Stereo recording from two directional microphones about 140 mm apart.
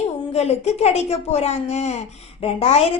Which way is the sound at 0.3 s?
50° left (ahead or behind).